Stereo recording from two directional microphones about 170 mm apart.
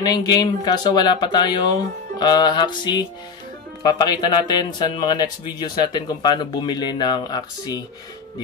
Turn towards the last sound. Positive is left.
turn(degrees=25)  # may be behind; listen again after turning